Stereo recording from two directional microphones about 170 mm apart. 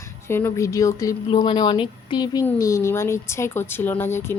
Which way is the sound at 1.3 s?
30° left (ahead or behind).